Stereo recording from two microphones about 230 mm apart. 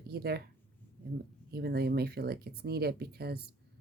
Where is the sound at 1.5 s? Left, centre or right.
Right.